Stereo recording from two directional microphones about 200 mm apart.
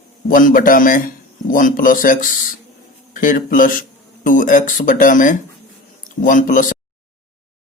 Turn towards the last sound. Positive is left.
turn(degrees=40)  # may be behind; listen again after turning